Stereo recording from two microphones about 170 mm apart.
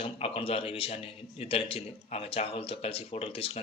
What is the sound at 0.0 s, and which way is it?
Speech, 35° left (ahead or behind).